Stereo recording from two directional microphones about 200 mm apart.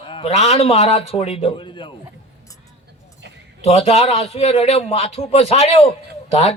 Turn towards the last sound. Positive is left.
turn(degrees=30)  # may be behind; listen again after turning